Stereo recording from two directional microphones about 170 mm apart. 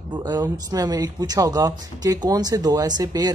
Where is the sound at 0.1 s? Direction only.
25° right (ahead or behind).